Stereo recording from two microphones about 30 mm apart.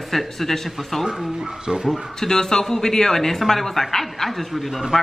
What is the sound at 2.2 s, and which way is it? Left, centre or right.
A man's voice, centre.